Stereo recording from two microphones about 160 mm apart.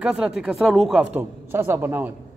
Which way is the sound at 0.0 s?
5° right (ahead or behind).